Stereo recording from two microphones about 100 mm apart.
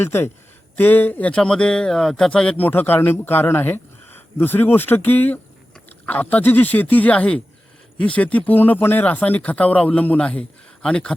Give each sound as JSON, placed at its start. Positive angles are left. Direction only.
{"t": 0.0, "sound": "speech", "side_deg": 25}